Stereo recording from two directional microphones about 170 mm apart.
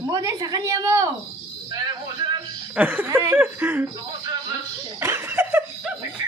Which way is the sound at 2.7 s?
10° right (ahead or behind).